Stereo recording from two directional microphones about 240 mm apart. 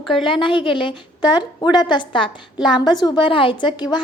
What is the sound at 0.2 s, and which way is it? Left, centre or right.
A woman's voice, left.